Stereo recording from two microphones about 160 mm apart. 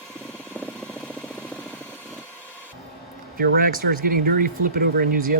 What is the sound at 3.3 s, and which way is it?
Speech, 65° right (ahead or behind).